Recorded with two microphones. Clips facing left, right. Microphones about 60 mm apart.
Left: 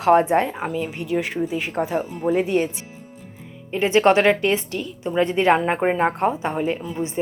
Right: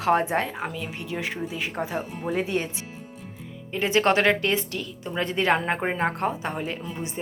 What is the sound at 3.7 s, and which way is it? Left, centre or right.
A woman's voice, left.